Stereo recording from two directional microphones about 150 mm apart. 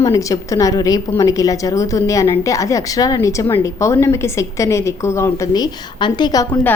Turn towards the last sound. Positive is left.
turn(degrees=25)  # may be behind; listen again after turning